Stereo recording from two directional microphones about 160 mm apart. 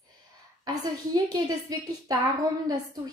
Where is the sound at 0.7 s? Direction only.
25° right (ahead or behind).